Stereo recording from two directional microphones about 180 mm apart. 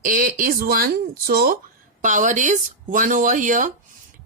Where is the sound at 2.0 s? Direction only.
45° right (ahead or behind).